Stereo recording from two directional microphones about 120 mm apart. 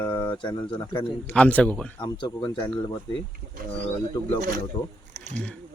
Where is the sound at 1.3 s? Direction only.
10° left (ahead or behind).